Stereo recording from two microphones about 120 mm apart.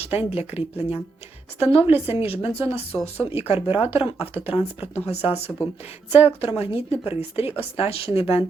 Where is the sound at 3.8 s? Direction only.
20° right (ahead or behind).